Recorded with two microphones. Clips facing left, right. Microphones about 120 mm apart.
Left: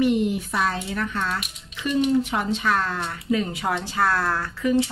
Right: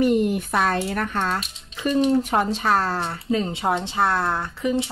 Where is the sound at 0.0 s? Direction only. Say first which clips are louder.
Right 2 dB; 45° right (ahead or behind).